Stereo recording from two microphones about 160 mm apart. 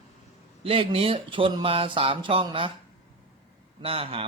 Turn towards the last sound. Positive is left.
turn(degrees=-35)  # may be behind; listen again after turning